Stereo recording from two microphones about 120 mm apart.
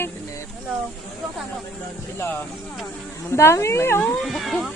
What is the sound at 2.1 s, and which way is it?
Speech, 15° left (ahead or behind).